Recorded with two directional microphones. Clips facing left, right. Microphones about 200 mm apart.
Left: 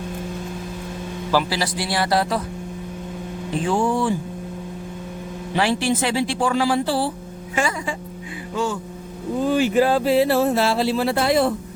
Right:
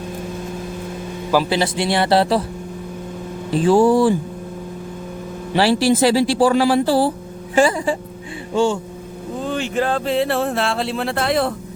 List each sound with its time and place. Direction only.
1.3 s a man's voice: 20° right (ahead or behind)
3.5 s speech: 35° right (ahead or behind)
5.5 s a man's voice: 35° right (ahead or behind)
9.4 s speech: 5° left (ahead or behind)